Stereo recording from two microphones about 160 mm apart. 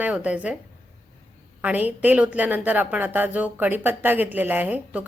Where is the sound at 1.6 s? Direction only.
10° right (ahead or behind).